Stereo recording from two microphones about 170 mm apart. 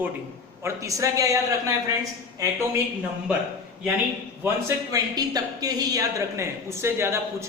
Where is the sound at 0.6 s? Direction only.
20° right (ahead or behind).